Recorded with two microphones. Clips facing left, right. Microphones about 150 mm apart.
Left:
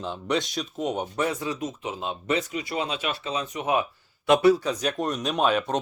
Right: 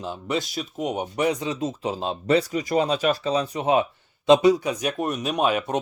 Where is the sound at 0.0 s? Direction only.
5° right (ahead or behind); by 3.8 s 30° right (ahead or behind).